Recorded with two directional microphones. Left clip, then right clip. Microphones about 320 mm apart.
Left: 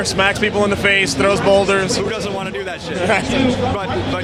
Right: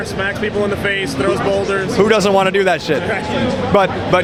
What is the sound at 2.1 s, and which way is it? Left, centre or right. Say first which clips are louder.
Speech: right 10 dB; right.